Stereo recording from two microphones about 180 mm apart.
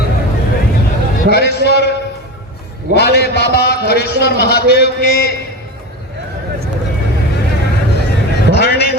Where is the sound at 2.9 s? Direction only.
65° left (ahead or behind).